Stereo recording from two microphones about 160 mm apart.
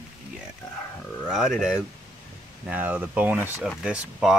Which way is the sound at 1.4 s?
Centre (ahead or behind).